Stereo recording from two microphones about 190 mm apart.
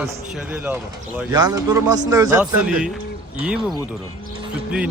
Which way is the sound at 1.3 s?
20° right (ahead or behind).